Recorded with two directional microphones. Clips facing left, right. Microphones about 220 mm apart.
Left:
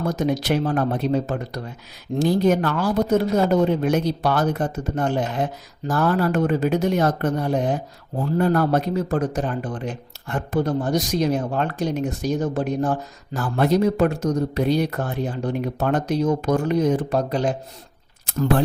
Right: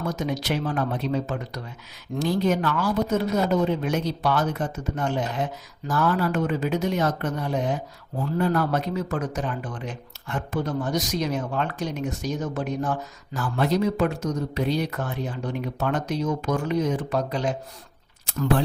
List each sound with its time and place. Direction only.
0.3 s speech: 45° left (ahead or behind)
10.6 s speech: 35° left (ahead or behind)
13.6 s speech: 50° left (ahead or behind)
13.9 s speech: 35° left (ahead or behind)
14.5 s speech: 45° left (ahead or behind)